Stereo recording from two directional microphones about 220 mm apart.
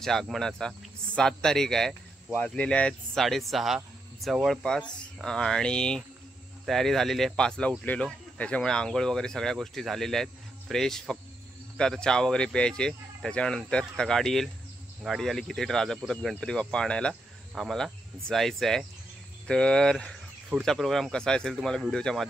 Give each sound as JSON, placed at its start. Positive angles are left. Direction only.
{"t": 0.0, "sound": "speech", "side_deg": 0}